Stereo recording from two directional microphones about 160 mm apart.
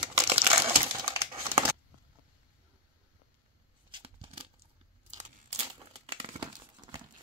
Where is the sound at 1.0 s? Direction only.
35° right (ahead or behind).